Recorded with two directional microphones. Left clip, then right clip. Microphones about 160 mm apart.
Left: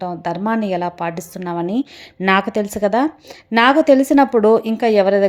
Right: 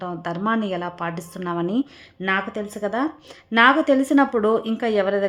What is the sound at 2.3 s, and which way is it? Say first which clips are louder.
A woman's voice: left 7 dB; 35° left (ahead or behind).